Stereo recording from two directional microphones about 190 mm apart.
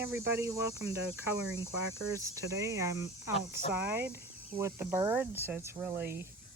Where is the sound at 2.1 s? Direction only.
15° right (ahead or behind).